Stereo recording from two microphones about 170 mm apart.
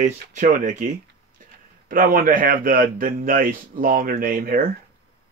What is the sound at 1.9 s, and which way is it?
A man's voice, 55° right (ahead or behind).